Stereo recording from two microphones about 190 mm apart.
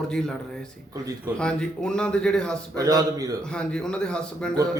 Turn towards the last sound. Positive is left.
turn(degrees=5)  # may be behind; listen again after turning